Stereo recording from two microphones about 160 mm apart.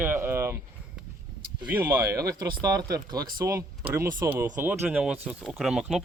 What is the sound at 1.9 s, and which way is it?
Speech, 20° right (ahead or behind).